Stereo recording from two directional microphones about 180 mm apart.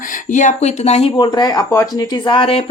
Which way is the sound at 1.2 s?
20° left (ahead or behind).